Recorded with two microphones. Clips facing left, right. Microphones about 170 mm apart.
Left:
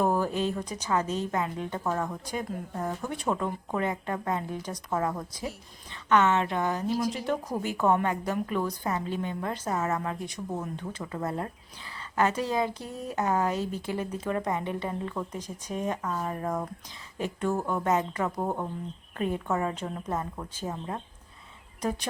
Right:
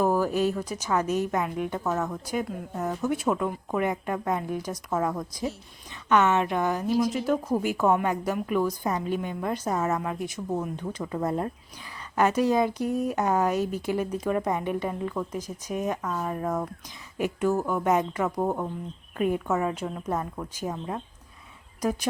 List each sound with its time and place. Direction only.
0.0 s a sound: 5° right (ahead or behind)
0.9 s a woman's voice: 10° right (ahead or behind)
16.0 s speech: 10° left (ahead or behind)
16.2 s a woman's voice: centre (ahead or behind)
20.1 s speech: 5° left (ahead or behind)
20.6 s a woman's voice: 10° right (ahead or behind)